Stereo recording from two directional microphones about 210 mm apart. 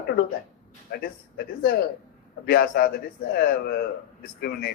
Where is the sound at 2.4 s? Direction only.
50° left (ahead or behind).